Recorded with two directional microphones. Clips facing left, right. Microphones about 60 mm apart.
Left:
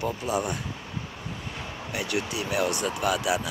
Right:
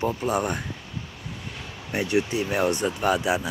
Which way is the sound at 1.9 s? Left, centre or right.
Right.